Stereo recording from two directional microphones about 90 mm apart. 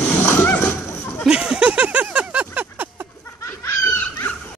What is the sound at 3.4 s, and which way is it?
Snicker, 25° left (ahead or behind).